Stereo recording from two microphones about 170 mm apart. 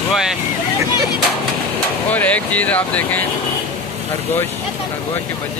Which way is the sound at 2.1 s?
10° left (ahead or behind).